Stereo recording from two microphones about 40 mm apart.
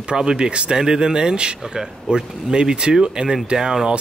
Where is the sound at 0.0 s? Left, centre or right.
Right.